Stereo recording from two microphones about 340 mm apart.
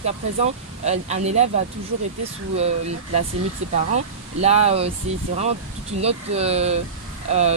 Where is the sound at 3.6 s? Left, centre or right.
Centre.